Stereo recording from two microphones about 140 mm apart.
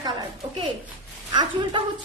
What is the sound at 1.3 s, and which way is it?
Speech, 35° right (ahead or behind).